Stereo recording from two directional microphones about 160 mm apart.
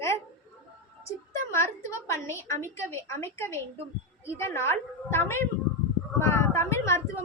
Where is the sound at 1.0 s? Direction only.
15° left (ahead or behind).